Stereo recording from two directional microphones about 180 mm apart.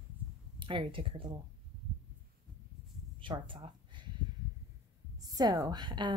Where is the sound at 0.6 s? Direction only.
30° right (ahead or behind).